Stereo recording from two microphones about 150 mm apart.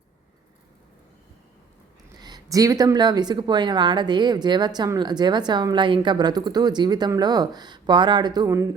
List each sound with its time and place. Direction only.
2.1 s speech: 30° right (ahead or behind)